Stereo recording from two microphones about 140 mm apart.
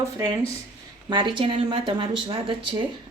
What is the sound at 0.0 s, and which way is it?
Speech, 25° right (ahead or behind).